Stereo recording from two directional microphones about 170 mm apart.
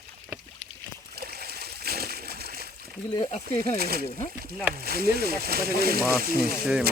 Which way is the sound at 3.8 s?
65° right (ahead or behind).